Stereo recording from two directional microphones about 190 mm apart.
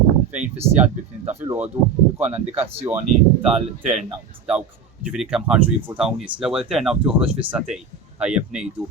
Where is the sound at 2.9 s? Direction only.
15° right (ahead or behind).